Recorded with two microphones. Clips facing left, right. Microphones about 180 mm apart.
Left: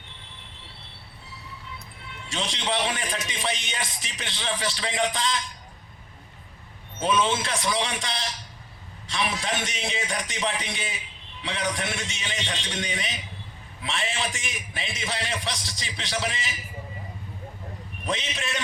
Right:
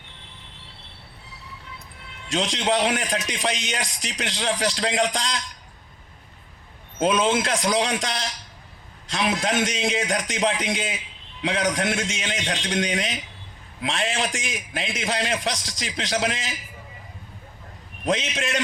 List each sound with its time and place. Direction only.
2.3 s a man's voice: 45° right (ahead or behind)
7.0 s a man's voice: 45° right (ahead or behind)
18.0 s a man's voice: 45° right (ahead or behind)